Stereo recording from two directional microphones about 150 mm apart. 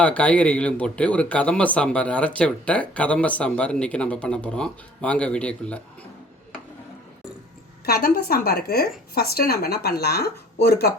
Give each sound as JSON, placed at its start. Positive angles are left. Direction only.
{"t": 0.0, "sound": "speech", "side_deg": 10}
{"t": 7.9, "sound": "a woman's voice", "side_deg": 85}